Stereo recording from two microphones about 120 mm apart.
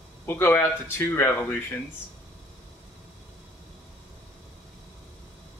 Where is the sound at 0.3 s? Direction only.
20° left (ahead or behind).